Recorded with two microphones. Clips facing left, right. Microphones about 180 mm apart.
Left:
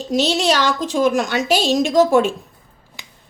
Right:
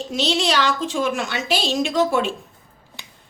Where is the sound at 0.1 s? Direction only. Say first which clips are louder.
Left 5 dB; 40° left (ahead or behind).